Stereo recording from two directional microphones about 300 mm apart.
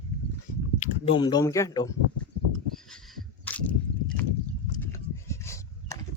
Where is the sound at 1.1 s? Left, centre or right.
Centre.